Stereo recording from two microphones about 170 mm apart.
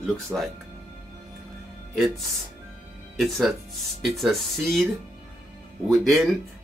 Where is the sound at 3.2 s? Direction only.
Centre (ahead or behind).